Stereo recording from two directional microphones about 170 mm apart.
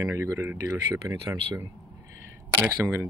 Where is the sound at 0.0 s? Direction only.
15° right (ahead or behind).